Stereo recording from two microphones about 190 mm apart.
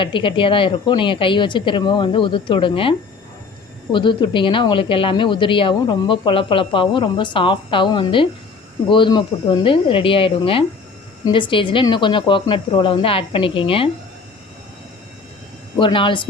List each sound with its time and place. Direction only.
0.0 s speech: 25° left (ahead or behind)
3.9 s speech: 25° left (ahead or behind)
15.8 s speech: 25° left (ahead or behind)